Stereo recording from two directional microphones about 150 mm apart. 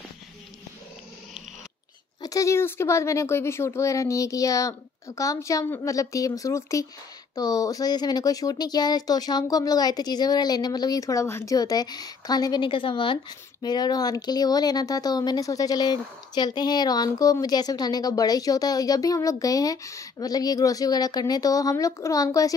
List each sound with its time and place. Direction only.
2.2 s speech: 20° left (ahead or behind)